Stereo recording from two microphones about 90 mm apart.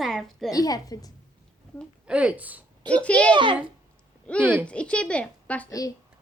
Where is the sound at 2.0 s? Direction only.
10° right (ahead or behind).